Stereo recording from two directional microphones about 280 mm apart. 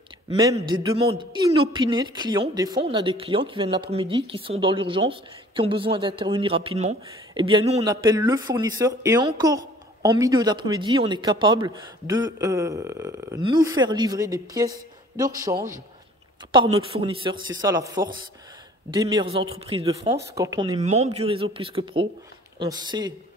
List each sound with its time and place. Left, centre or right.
0.3 s speech: centre
16.5 s speech: centre